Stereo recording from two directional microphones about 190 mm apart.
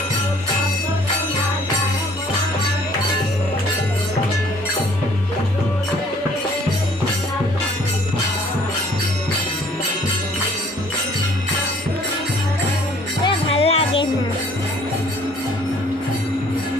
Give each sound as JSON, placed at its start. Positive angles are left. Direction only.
{"t": 13.2, "sound": "music", "side_deg": 30}